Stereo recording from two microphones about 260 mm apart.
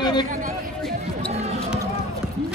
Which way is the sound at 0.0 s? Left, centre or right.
Centre.